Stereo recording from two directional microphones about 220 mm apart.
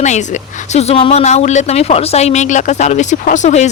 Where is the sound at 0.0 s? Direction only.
30° left (ahead or behind).